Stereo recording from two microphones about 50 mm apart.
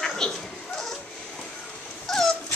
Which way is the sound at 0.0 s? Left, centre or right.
Centre.